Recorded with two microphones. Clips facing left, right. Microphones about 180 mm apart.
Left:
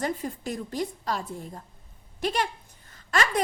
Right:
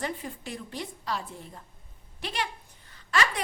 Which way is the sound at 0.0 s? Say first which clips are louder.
Left 5 dB; 40° left (ahead or behind).